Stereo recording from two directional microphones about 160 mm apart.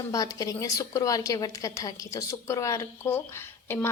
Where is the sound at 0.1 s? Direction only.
20° left (ahead or behind).